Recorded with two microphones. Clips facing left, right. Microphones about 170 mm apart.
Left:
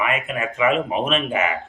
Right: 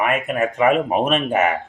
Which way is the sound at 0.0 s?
50° right (ahead or behind).